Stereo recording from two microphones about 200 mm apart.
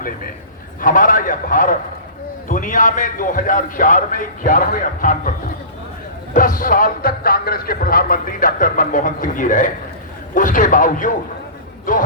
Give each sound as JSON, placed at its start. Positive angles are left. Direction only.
{"t": 0.8, "sound": "a man's voice", "side_deg": 45}
{"t": 6.3, "sound": "a man's voice", "side_deg": 45}